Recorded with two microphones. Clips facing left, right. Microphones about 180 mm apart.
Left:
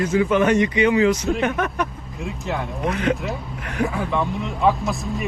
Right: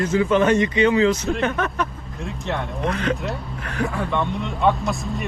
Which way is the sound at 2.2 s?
Centre (ahead or behind).